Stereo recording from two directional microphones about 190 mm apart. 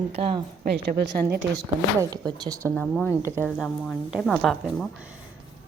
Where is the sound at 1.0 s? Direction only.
60° right (ahead or behind).